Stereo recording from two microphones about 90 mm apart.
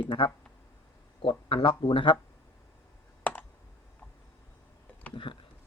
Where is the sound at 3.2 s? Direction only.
20° left (ahead or behind).